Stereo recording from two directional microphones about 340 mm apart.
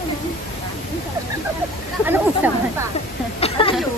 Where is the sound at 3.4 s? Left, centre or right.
Centre.